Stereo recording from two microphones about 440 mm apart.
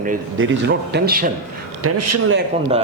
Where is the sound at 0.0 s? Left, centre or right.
Right.